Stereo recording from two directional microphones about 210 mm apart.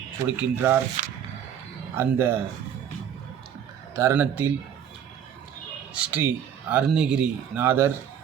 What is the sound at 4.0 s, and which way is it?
Speech, 10° right (ahead or behind).